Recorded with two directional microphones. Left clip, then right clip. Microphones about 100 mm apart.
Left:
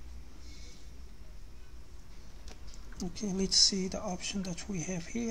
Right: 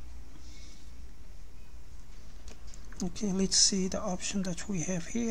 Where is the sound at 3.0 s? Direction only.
45° right (ahead or behind).